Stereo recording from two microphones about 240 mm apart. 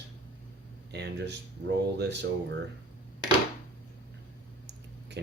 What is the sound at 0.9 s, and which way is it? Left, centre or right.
Speech, right.